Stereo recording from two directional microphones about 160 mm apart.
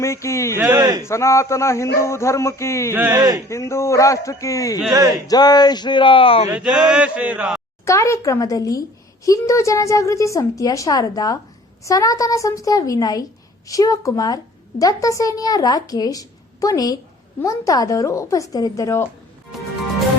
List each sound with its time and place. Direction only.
0.0 s speech: 15° left (ahead or behind)
0.5 s speech: 20° right (ahead or behind)
1.0 s speech: 20° left (ahead or behind)
2.9 s a man's voice: 10° right (ahead or behind)
3.2 s speech: 25° right (ahead or behind)
3.5 s a woman's voice: 20° left (ahead or behind); by 6.5 s 35° left (ahead or behind)
6.5 s male singing: 5° right (ahead or behind)
7.9 s a woman's voice: 20° left (ahead or behind)